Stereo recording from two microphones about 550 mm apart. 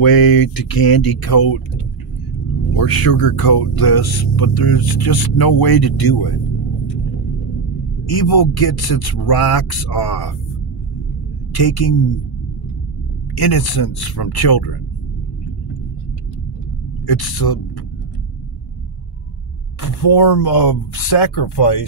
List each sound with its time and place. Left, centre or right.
0.0 s speech: left
2.7 s speech: left
8.1 s speech: left
11.5 s speech: left
13.3 s speech: left
17.0 s speech: left
19.8 s speech: left